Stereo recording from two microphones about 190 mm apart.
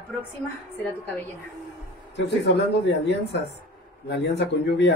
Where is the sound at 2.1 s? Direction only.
65° left (ahead or behind).